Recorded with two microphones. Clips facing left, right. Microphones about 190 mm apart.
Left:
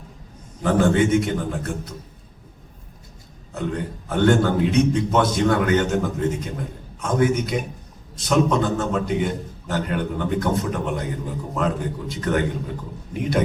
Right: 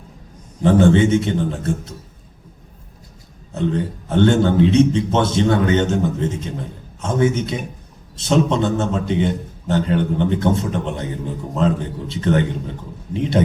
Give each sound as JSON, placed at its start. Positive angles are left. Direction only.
{"t": 0.6, "sound": "a man's voice", "side_deg": -25}
{"t": 3.5, "sound": "a man's voice", "side_deg": -25}